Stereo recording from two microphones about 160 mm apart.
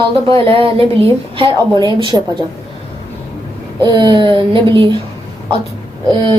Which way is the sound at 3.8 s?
25° right (ahead or behind).